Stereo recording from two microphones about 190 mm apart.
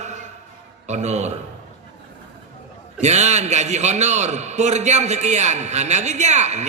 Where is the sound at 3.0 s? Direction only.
35° right (ahead or behind).